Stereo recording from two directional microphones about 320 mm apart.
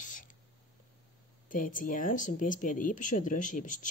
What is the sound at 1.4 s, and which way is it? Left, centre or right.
Speech, left.